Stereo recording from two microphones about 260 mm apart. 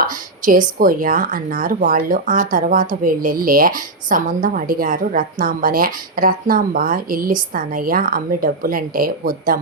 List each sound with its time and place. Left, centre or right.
0.0 s speech: right